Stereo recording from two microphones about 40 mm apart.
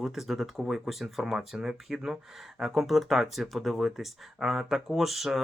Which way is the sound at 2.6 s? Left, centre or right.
Centre.